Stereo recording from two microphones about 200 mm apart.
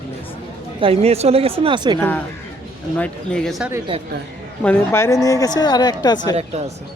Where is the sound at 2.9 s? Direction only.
5° left (ahead or behind).